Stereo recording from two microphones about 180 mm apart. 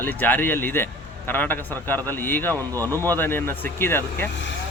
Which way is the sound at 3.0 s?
10° left (ahead or behind).